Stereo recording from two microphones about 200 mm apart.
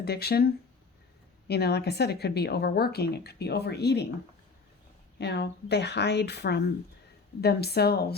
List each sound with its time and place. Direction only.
0.0 s speech: 55° left (ahead or behind)
5.1 s speech: 55° left (ahead or behind)